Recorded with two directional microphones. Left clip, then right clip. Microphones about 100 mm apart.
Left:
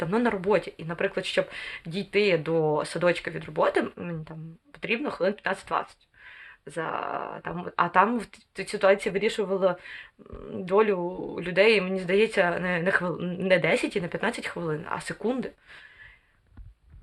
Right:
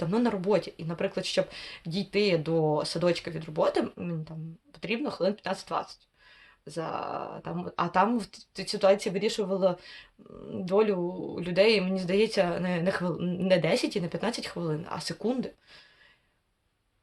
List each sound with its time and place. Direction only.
0.0 s speech: 20° right (ahead or behind)